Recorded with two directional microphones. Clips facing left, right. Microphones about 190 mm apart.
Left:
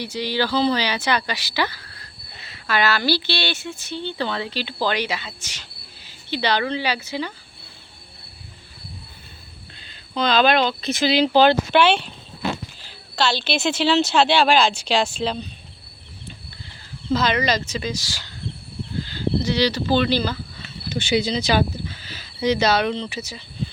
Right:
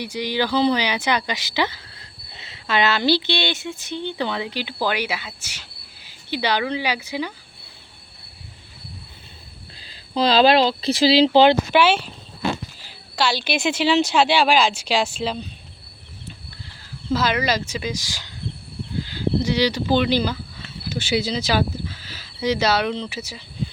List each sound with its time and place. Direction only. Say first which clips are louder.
0.0 s speech: even; 15° right (ahead or behind)
10.2 s speech: right 3 dB; 30° right (ahead or behind)
11.7 s speech: even; 5° right (ahead or behind)
17.1 s speech: left 1 dB; 5° right (ahead or behind)
20.9 s speech: left 2 dB; 5° right (ahead or behind)